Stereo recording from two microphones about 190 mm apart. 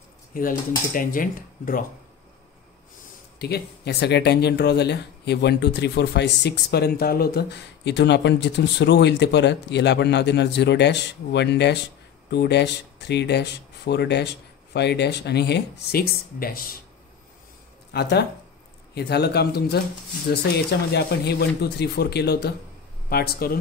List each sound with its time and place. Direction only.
0.3 s speech: 50° left (ahead or behind)
3.3 s speech: 55° left (ahead or behind)
17.9 s speech: 60° left (ahead or behind)